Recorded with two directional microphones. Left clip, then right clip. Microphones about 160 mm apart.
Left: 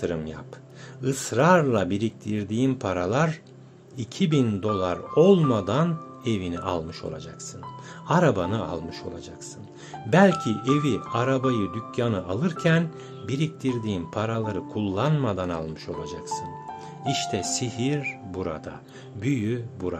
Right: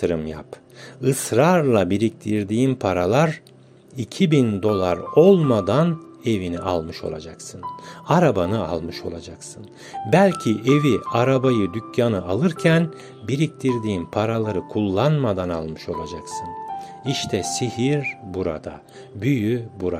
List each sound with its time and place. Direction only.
0.0 s speech: 35° right (ahead or behind)